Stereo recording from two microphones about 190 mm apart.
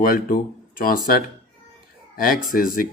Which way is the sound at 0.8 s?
50° left (ahead or behind).